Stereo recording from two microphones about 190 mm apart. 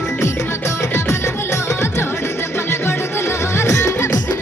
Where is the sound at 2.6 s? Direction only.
15° left (ahead or behind).